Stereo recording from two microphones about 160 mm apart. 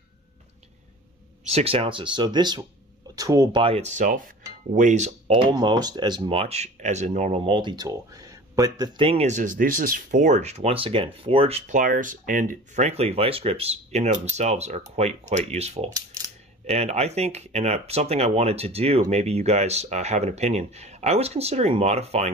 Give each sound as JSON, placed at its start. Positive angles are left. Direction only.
{"t": 1.5, "sound": "speech", "side_deg": -40}
{"t": 3.6, "sound": "speech", "side_deg": -40}
{"t": 5.3, "sound": "speech", "side_deg": -30}